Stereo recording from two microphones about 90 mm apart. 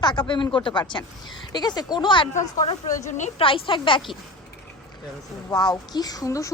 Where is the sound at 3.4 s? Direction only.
80° left.